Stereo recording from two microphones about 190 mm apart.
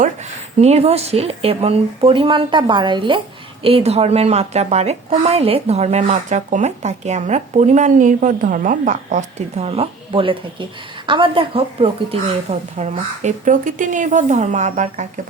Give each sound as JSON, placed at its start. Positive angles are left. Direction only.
{"t": 0.6, "sound": "a woman's voice", "side_deg": -35}